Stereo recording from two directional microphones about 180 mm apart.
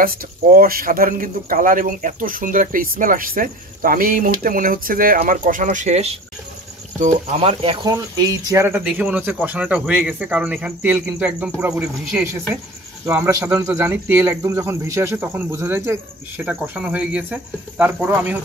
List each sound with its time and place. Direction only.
0.0 s a man's voice: 55° right (ahead or behind); by 18.4 s 10° right (ahead or behind)